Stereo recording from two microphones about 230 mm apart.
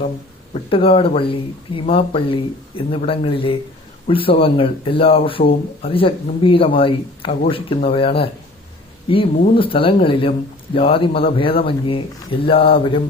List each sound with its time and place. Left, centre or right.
0.5 s speech: left